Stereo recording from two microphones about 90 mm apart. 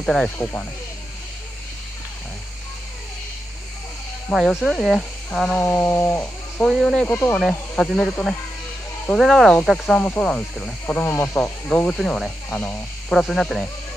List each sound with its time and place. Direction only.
0.0 s speech: 5° left (ahead or behind)
0.4 s speech: 25° left (ahead or behind)
4.3 s speech: 5° right (ahead or behind)
5.6 s speech: 25° left (ahead or behind)
6.7 s speech: centre (ahead or behind)
12.4 s speech: 15° left (ahead or behind)
13.1 s speech: 5° left (ahead or behind)